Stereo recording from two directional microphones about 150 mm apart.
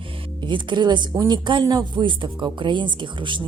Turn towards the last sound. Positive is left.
turn(degrees=-30)  # may be behind; listen again after turning